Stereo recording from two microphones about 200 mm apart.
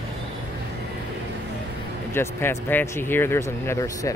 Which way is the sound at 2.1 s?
10° left (ahead or behind).